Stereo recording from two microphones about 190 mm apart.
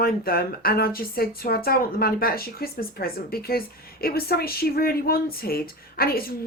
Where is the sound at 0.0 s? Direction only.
50° left (ahead or behind).